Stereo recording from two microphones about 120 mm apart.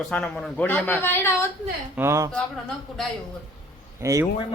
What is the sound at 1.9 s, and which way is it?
Speech, 20° right (ahead or behind).